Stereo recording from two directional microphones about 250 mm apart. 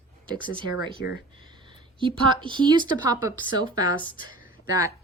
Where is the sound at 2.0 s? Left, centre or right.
Centre.